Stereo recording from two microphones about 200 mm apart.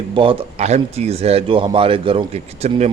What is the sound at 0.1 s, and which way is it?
Speech, 25° right (ahead or behind).